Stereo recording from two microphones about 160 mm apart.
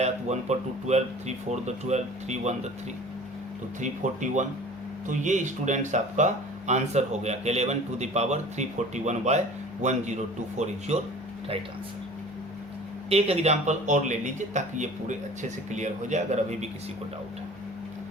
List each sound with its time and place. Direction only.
0.0 s speech: 45° right (ahead or behind)
3.8 s speech: 50° right (ahead or behind)
13.1 s speech: 40° right (ahead or behind)